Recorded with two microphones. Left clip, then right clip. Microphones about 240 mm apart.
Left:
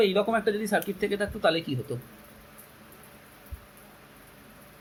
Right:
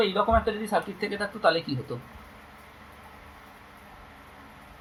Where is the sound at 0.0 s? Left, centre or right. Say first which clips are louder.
Right 1 dB; left.